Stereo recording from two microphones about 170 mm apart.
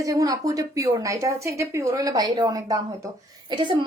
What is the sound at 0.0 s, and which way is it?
A woman's voice, 20° right (ahead or behind).